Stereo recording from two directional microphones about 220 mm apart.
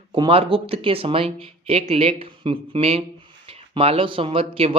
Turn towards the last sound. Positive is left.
turn(degrees=-25)  # may be behind; listen again after turning